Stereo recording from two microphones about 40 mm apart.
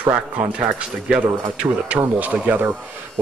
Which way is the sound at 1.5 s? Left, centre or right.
Right.